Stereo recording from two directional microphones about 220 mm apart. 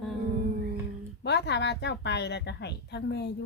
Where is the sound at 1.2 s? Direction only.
50° left (ahead or behind).